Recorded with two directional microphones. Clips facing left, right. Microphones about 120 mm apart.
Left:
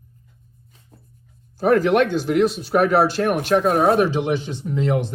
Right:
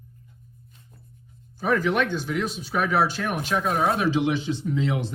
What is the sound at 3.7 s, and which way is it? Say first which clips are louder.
Speech: left 6 dB; 40° left (ahead or behind).